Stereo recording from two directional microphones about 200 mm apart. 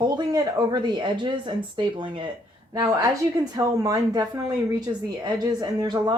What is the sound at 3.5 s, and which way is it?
A woman's voice, 15° right (ahead or behind).